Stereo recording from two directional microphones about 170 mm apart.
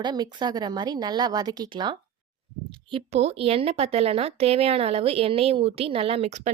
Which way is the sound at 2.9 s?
40° right (ahead or behind).